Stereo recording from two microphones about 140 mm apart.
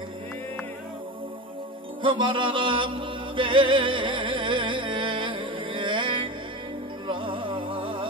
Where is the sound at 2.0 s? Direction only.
35° right (ahead or behind).